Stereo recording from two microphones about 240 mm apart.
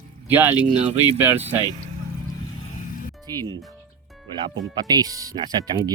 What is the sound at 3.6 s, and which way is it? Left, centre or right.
Music, centre.